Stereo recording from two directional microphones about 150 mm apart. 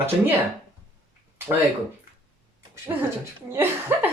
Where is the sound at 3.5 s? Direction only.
15° right (ahead or behind).